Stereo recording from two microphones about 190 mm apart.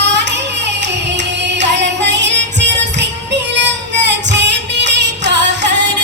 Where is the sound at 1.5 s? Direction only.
65° right (ahead or behind).